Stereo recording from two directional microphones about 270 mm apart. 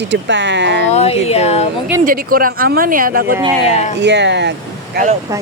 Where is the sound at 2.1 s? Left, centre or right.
Right.